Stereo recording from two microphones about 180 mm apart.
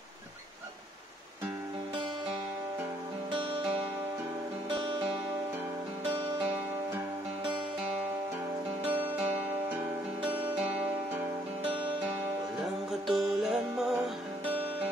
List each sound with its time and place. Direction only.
4.6 s music: 25° right (ahead or behind)
13.0 s music: centre (ahead or behind)